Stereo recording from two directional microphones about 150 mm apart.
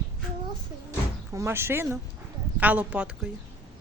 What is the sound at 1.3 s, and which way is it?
Speech, 15° right (ahead or behind).